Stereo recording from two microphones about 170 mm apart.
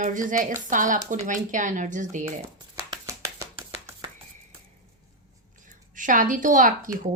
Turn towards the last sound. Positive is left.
turn(degrees=-50)  # may be behind; listen again after turning